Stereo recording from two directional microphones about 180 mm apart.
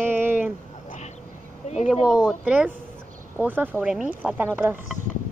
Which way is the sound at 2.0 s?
5° left (ahead or behind).